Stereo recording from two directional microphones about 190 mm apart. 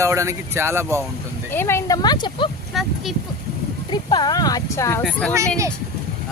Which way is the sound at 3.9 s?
25° left (ahead or behind).